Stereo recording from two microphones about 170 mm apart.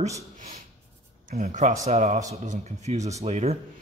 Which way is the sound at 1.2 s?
45° right (ahead or behind).